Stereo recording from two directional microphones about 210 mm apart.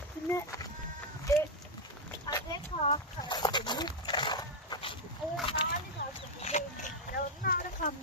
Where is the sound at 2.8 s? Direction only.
25° left (ahead or behind).